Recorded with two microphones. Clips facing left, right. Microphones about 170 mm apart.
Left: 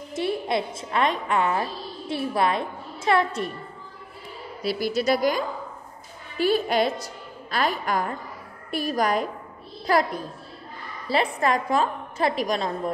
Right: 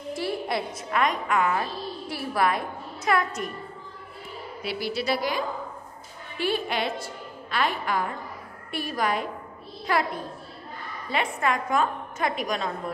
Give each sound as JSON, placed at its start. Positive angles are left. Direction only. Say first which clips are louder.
{"t": 0.1, "sound": "a woman's voice", "louder": "left 3 dB", "side_deg": 20}
{"t": 4.6, "sound": "a woman's voice", "louder": "left 5 dB", "side_deg": 45}
{"t": 11.1, "sound": "a woman's voice", "louder": "left 4 dB", "side_deg": 35}